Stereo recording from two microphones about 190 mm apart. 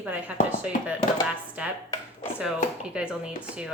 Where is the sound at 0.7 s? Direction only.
45° left (ahead or behind).